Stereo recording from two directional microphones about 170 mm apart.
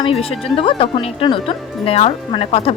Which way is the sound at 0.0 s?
35° left (ahead or behind).